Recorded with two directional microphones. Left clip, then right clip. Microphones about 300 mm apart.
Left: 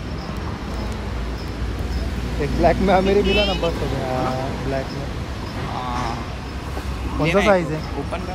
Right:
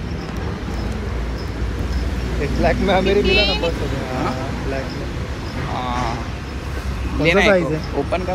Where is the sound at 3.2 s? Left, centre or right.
Centre.